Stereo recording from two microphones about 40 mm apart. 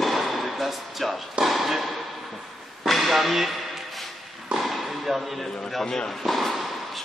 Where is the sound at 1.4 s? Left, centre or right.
Centre.